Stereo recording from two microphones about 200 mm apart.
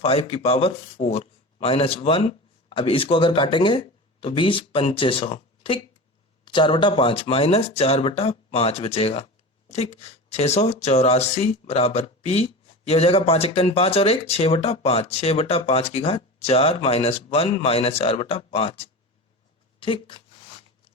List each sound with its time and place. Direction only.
0.0 s speech: 30° left (ahead or behind)